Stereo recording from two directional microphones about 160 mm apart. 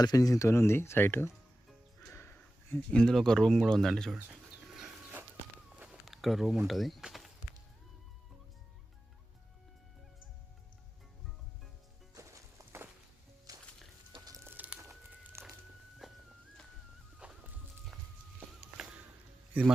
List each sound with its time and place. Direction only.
0.0 s speech: 25° left (ahead or behind); by 4.4 s centre (ahead or behind)
5.8 s a sound: 5° right (ahead or behind)
6.7 s speech: centre (ahead or behind)
12.1 s music: 15° right (ahead or behind)
14.1 s a sound: 20° right (ahead or behind)
16.0 s music: centre (ahead or behind)
17.2 s music: 5° right (ahead or behind)
18.3 s walk: 5° right (ahead or behind)
19.5 s a man's voice: 10° right (ahead or behind)